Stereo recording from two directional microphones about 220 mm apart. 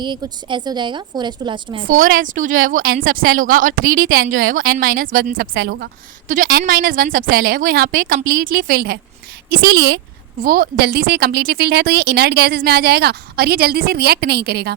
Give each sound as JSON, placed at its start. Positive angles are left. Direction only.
{"t": 0.0, "sound": "a woman's voice", "side_deg": -20}
{"t": 1.9, "sound": "a woman's voice", "side_deg": -40}
{"t": 6.2, "sound": "a woman's voice", "side_deg": -35}